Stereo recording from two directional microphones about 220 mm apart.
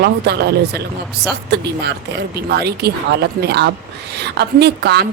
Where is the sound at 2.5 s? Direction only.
45° right (ahead or behind).